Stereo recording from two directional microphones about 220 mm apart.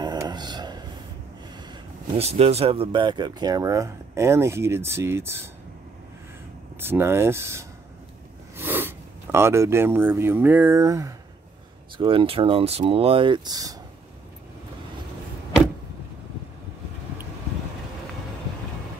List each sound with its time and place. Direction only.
0.0 s a sound: 20° right (ahead or behind)
1.7 s speech: 25° right (ahead or behind); by 5.5 s 10° right (ahead or behind)
6.8 s speech: 10° right (ahead or behind)